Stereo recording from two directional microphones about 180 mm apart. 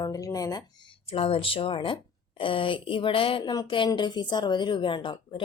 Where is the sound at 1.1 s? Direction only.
30° left (ahead or behind).